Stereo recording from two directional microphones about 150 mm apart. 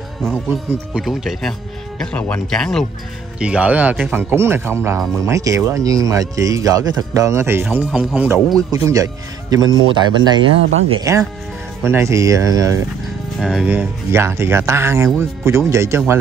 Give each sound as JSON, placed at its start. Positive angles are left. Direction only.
{"t": 0.7, "sound": "speech", "side_deg": -5}
{"t": 3.3, "sound": "speech", "side_deg": -5}
{"t": 8.8, "sound": "speech", "side_deg": -25}
{"t": 13.4, "sound": "speech", "side_deg": -5}
{"t": 13.7, "sound": "speech", "side_deg": -15}